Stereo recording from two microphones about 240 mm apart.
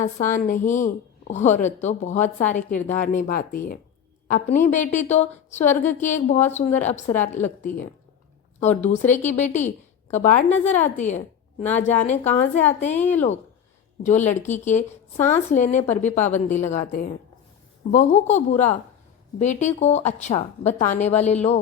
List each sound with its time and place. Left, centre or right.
0.0 s a woman's voice: left
7.1 s a woman's voice: centre
8.6 s a woman's voice: left
13.0 s a woman's voice: centre
14.0 s a woman's voice: left